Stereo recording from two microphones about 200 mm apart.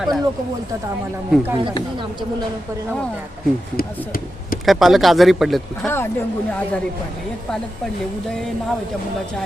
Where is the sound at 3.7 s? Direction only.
45° left (ahead or behind).